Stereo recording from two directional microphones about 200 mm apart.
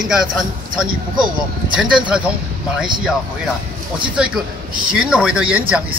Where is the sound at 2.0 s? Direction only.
5° right (ahead or behind).